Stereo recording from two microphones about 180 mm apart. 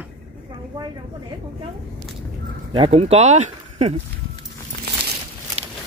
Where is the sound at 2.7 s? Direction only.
30° right (ahead or behind).